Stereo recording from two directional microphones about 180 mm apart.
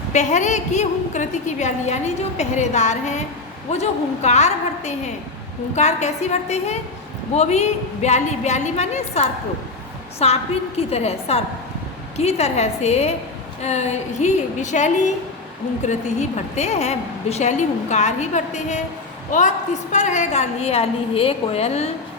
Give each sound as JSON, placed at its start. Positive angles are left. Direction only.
{"t": 0.1, "sound": "a woman's voice", "side_deg": 40}